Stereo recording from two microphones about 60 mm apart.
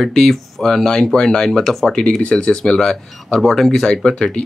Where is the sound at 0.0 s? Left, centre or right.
Centre.